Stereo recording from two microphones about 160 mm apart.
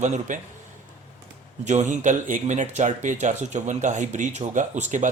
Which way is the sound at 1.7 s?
50° right (ahead or behind).